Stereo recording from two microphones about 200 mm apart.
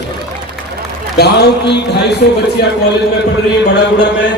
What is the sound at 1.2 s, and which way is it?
Speech, 55° left (ahead or behind).